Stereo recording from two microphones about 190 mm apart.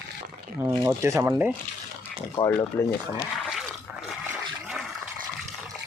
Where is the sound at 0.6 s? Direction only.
15° right (ahead or behind).